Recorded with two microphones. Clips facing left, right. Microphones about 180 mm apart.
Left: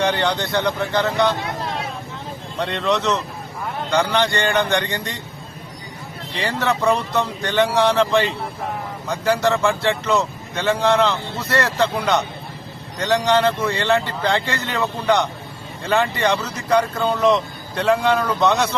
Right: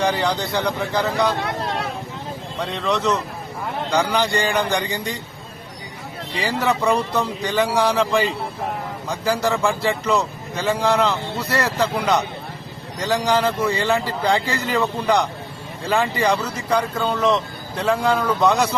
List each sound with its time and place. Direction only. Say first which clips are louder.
0.0 s speech: left 1 dB; centre (ahead or behind)
2.6 s speech: left 2 dB; centre (ahead or behind)
6.4 s speech: even; centre (ahead or behind)